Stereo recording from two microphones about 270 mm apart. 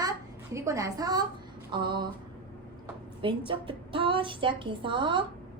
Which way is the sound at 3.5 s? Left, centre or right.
Centre.